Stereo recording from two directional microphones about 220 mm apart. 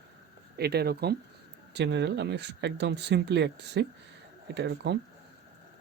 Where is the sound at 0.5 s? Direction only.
45° right (ahead or behind).